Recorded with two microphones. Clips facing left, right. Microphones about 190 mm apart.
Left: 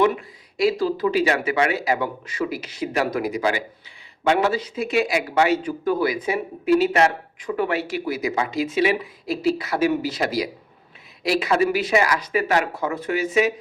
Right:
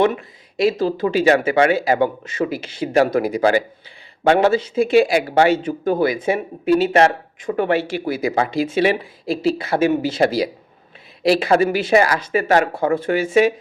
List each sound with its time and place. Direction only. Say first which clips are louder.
0.0 s speech: right 2 dB; 25° right (ahead or behind)